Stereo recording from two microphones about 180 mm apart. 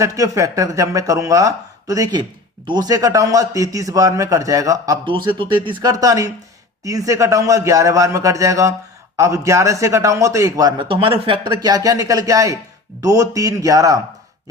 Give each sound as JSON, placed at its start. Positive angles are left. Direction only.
{"t": 0.0, "sound": "a man's voice", "side_deg": -20}
{"t": 10.8, "sound": "a man's voice", "side_deg": -30}